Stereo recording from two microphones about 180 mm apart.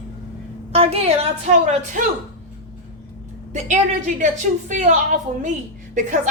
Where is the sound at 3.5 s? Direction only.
45° right (ahead or behind).